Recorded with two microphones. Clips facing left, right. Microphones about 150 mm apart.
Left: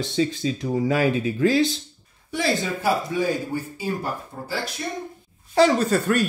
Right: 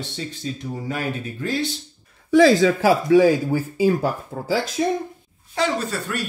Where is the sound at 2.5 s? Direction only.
90° right.